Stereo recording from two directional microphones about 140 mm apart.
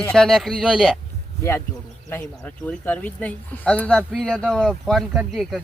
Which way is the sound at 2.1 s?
10° left (ahead or behind).